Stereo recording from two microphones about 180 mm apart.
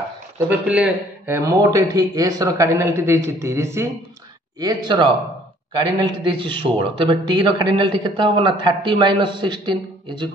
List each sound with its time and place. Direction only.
0.4 s a man's voice: 10° right (ahead or behind); by 10.3 s 25° right (ahead or behind)